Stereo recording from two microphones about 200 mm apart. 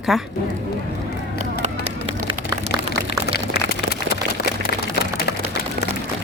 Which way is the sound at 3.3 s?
55° left (ahead or behind).